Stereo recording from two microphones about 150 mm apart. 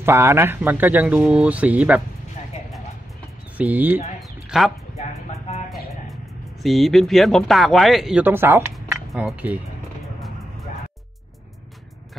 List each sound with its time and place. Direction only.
0.0 s a man's voice: 15° right (ahead or behind)
3.5 s a man's voice: 10° right (ahead or behind)
4.5 s speech: centre (ahead or behind)
6.6 s a man's voice: centre (ahead or behind)